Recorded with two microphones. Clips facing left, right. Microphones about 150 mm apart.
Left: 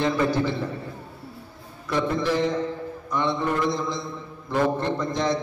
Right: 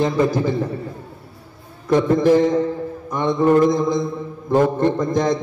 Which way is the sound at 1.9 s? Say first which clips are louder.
Right 9 dB; 45° right (ahead or behind).